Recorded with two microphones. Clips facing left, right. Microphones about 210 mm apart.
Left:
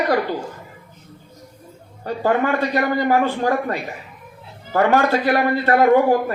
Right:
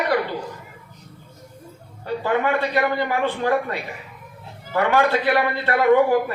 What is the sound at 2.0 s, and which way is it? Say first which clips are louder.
A man's voice: left 2 dB; 45° left (ahead or behind).